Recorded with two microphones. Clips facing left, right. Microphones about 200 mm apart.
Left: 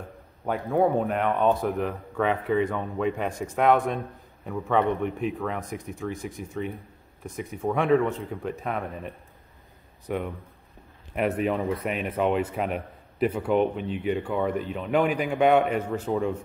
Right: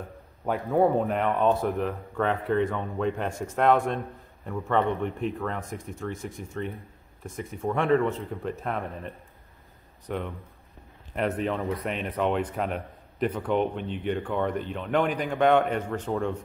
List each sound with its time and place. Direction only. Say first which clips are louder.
0.5 s speech: even; centre (ahead or behind)
10.0 s a man's voice: left 2 dB; 5° left (ahead or behind)